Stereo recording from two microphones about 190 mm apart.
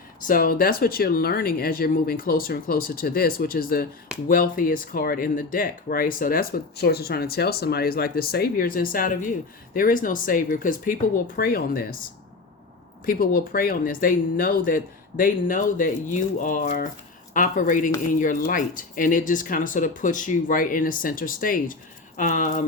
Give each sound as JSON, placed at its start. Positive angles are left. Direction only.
{"t": 0.2, "sound": "speech", "side_deg": 50}
{"t": 13.1, "sound": "speech", "side_deg": 50}